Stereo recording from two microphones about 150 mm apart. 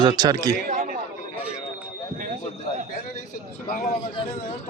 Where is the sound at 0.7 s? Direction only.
65° right (ahead or behind).